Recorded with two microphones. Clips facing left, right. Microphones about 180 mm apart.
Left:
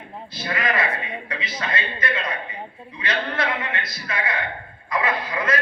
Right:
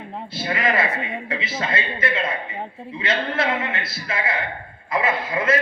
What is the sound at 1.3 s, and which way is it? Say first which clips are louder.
A man's voice: right 2 dB; 25° right (ahead or behind).